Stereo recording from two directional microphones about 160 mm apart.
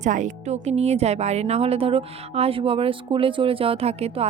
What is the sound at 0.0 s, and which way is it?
Speech, 50° right (ahead or behind).